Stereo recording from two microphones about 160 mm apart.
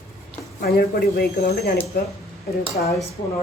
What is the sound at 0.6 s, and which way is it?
A woman's voice, 70° left (ahead or behind).